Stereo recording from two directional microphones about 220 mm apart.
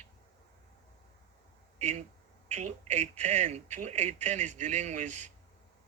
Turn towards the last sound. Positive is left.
turn(degrees=-35)  # may be behind; listen again after turning